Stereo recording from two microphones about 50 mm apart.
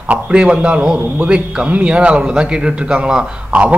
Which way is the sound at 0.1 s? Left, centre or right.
Right.